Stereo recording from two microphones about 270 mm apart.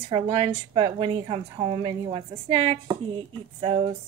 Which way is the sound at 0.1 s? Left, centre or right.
Centre.